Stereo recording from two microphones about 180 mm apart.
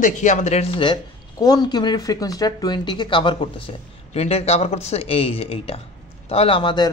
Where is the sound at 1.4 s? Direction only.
20° left (ahead or behind).